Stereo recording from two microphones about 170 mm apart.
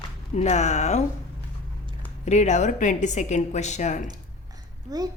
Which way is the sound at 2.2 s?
45° left (ahead or behind).